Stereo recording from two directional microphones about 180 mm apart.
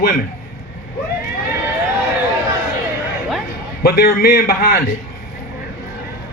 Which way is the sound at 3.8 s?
60° left (ahead or behind).